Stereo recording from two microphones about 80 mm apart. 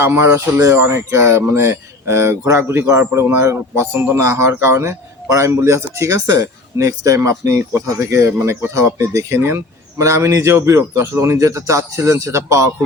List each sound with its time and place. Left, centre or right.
0.0 s a man's voice: right